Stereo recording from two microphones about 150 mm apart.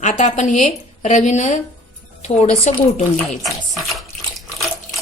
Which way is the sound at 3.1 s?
Centre (ahead or behind).